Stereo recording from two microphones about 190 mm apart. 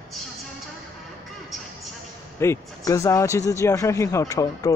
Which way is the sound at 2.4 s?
15° left (ahead or behind).